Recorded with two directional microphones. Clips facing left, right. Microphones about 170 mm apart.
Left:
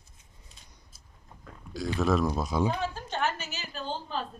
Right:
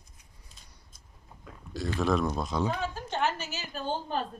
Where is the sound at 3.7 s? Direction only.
55° right (ahead or behind).